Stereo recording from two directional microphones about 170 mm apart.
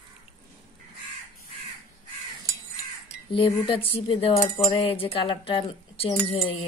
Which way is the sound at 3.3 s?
30° left (ahead or behind).